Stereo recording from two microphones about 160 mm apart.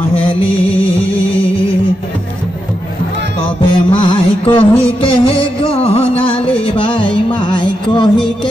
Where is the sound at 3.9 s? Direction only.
35° left (ahead or behind).